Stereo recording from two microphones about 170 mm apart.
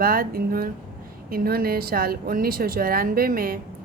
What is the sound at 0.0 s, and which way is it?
Speech, 60° right (ahead or behind).